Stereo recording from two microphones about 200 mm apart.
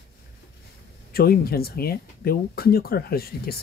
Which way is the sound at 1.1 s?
50° left (ahead or behind).